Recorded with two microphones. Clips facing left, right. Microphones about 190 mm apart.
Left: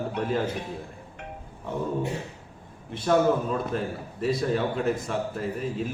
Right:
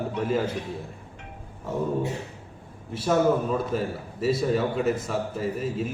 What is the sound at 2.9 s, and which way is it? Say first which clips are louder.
A man's voice: even; 5° right (ahead or behind).